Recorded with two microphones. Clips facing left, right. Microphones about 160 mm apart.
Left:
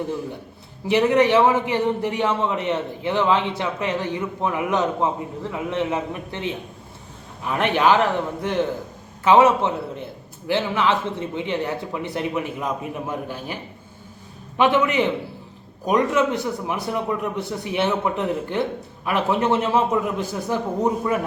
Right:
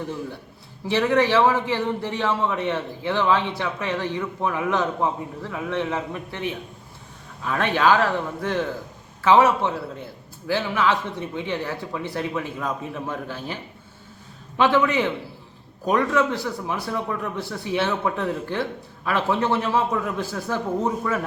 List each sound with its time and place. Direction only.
0.9 s a man's voice: 20° left (ahead or behind)
14.6 s a man's voice: 20° left (ahead or behind)